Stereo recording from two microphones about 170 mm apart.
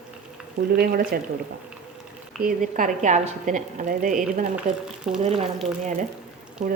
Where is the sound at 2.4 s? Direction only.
50° right (ahead or behind).